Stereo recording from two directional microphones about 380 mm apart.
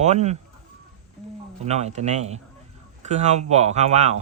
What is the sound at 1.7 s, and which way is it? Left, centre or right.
Speech, centre.